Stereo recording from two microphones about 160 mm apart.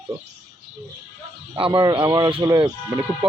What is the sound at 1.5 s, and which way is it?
Speech, 30° right (ahead or behind).